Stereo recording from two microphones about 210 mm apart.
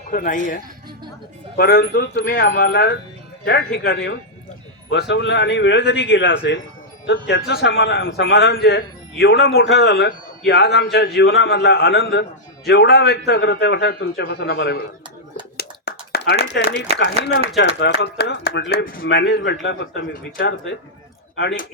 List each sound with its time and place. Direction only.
0.1 s a man's voice: 40° left (ahead or behind)
15.5 s a sound: 50° left (ahead or behind)
17.0 s a man's voice: 55° left (ahead or behind)